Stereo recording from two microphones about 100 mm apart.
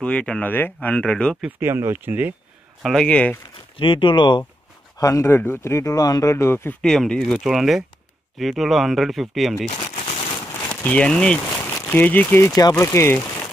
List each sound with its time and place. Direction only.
0.0 s speech: 10° left (ahead or behind)
1.6 s speech: 25° right (ahead or behind)
2.8 s speech: 5° left (ahead or behind)
3.7 s speech: 60° left (ahead or behind)
4.9 s speech: 30° left (ahead or behind)
6.3 s speech: 25° left (ahead or behind)
6.8 s speech: 5° left (ahead or behind)
9.9 s a sound: 90° left
10.7 s speech: 15° left (ahead or behind)
12.4 s speech: 35° left (ahead or behind)
12.8 s speech: 25° left (ahead or behind)